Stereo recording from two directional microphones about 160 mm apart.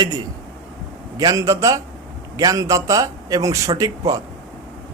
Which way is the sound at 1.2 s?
20° right (ahead or behind).